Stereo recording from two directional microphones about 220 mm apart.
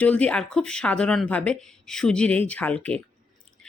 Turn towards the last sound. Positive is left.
turn(degrees=5)  # may be behind; listen again after turning